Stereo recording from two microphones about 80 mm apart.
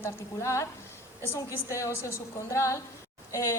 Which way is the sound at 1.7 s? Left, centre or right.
Left.